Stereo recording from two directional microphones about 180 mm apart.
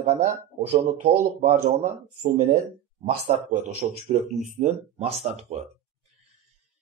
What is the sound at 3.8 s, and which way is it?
Speech, 35° right (ahead or behind).